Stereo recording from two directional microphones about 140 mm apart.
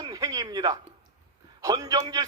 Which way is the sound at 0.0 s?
25° right (ahead or behind).